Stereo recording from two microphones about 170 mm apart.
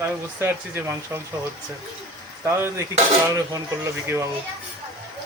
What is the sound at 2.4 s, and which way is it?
Speech, 15° right (ahead or behind).